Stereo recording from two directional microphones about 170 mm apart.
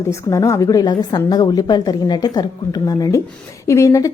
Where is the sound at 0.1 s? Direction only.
20° left (ahead or behind).